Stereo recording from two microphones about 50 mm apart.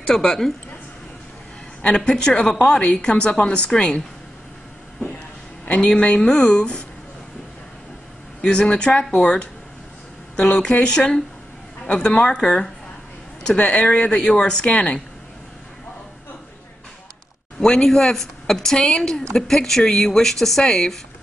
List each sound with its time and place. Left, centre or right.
0.1 s speech: centre
1.8 s speech: centre
5.7 s speech: left
8.4 s speech: centre
13.6 s speech: left
17.6 s speech: centre